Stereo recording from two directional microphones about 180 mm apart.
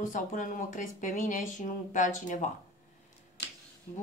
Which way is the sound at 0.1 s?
45° left (ahead or behind).